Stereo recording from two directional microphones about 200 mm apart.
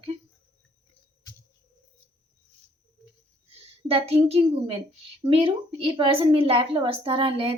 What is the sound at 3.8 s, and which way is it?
Speech, 30° right (ahead or behind).